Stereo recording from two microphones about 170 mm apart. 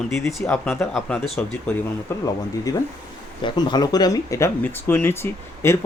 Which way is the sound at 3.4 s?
25° left (ahead or behind).